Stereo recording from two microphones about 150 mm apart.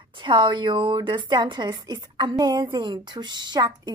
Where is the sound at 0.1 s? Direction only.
30° right (ahead or behind).